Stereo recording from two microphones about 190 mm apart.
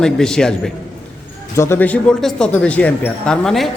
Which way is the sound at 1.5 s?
15° left (ahead or behind).